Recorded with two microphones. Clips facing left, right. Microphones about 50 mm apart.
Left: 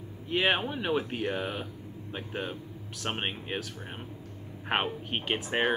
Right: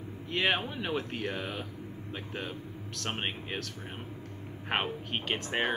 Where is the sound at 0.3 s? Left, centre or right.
Centre.